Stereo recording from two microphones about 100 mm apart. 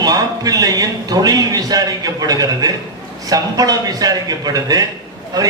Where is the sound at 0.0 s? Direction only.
40° right (ahead or behind).